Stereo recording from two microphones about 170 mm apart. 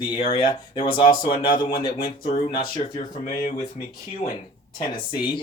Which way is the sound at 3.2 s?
55° left (ahead or behind).